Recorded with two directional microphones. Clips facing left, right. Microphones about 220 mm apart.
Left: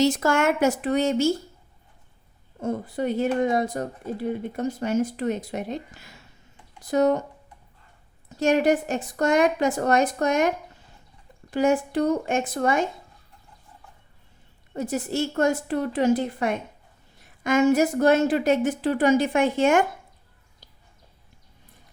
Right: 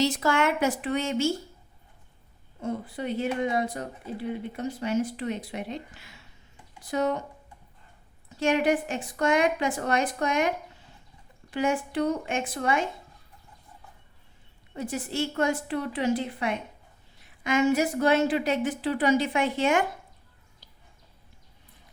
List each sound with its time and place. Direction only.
0.0 s speech: 45° left (ahead or behind)
2.6 s speech: 45° left (ahead or behind)
8.4 s speech: 40° left (ahead or behind)
11.5 s speech: 40° left (ahead or behind)
14.7 s speech: 45° left (ahead or behind)
20.6 s a sound: 45° left (ahead or behind)